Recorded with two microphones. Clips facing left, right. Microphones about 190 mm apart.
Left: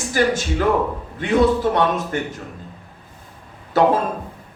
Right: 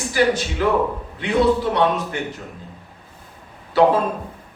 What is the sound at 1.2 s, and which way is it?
A man's voice, 50° left (ahead or behind).